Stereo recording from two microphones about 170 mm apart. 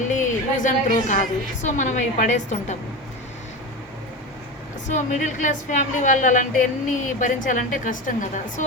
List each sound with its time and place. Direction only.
0.0 s a sound: 45° left (ahead or behind)
1.6 s a woman's voice: 45° left (ahead or behind)
4.9 s a woman's voice: 45° left (ahead or behind)